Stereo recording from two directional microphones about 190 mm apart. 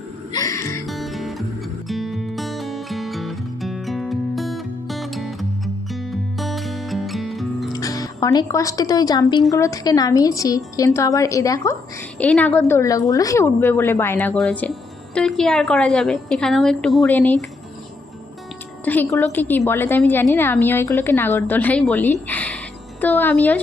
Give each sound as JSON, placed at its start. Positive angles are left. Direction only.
{"t": 0.3, "sound": "music", "side_deg": 20}
{"t": 0.9, "sound": "music", "side_deg": 0}
{"t": 7.7, "sound": "a woman's voice", "side_deg": 20}
{"t": 18.9, "sound": "a woman's voice", "side_deg": 10}
{"t": 22.3, "sound": "a sound", "side_deg": 5}